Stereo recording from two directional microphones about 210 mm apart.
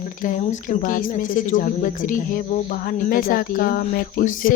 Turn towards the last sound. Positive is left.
turn(degrees=40)  # may be behind; listen again after turning